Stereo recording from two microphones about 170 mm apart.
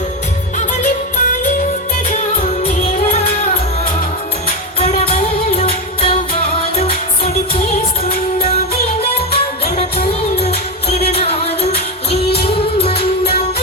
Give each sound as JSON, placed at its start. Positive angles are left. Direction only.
{"t": 0.8, "sound": "music", "side_deg": 50}
{"t": 2.6, "sound": "music", "side_deg": 35}
{"t": 4.8, "sound": "music", "side_deg": 35}